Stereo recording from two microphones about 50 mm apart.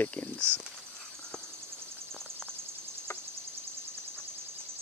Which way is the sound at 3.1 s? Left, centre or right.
Left.